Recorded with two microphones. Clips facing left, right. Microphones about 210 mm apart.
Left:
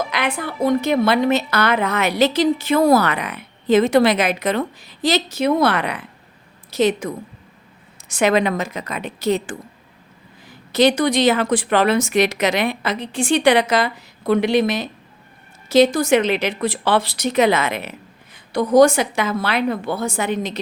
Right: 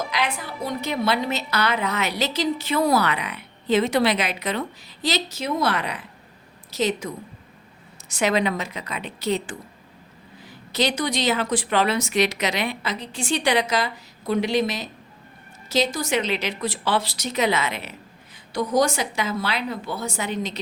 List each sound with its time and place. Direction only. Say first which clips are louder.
0.1 s a woman's voice: left 4 dB; 55° left (ahead or behind)
10.7 s a woman's voice: left 8 dB; 50° left (ahead or behind)